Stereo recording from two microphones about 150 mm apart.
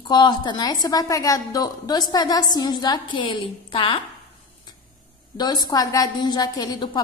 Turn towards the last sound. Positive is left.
turn(degrees=30)  # may be behind; listen again after turning